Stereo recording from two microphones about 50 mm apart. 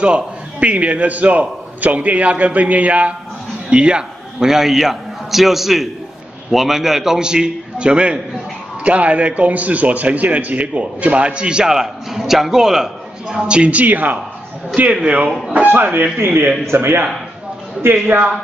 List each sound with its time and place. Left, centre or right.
0.0 s a man's voice: right; by 7.2 s centre
7.2 s a man's voice: centre
13.5 s a man's voice: right
15.6 s a man's voice: right